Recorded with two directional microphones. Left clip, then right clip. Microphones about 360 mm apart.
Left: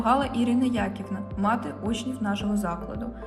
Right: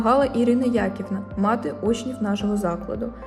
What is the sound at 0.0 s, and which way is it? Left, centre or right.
Speech, right.